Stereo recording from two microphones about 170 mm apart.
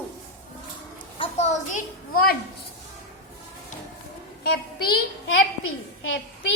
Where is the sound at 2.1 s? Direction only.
60° left (ahead or behind).